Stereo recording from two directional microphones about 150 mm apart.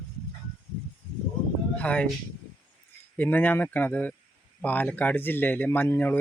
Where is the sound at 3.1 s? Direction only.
10° left (ahead or behind).